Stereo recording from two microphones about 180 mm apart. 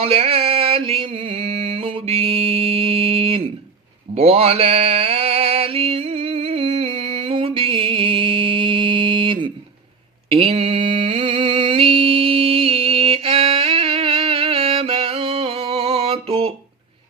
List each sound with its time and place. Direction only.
0.0 s mantra: 30° right (ahead or behind)